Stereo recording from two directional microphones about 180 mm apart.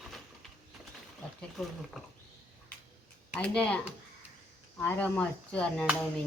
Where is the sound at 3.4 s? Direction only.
5° left (ahead or behind).